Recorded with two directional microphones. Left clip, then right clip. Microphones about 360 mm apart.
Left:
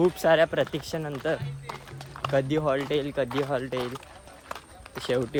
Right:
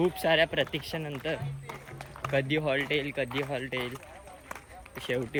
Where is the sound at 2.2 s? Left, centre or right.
Centre.